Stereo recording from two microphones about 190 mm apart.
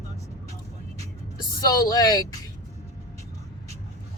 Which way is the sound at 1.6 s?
20° left (ahead or behind).